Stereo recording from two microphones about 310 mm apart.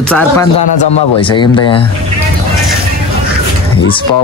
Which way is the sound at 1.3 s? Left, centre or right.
Centre.